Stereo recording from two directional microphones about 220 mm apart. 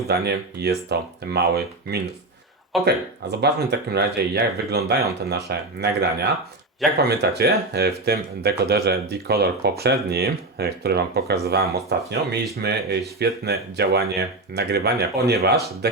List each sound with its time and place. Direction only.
0.1 s speech: 50° right (ahead or behind)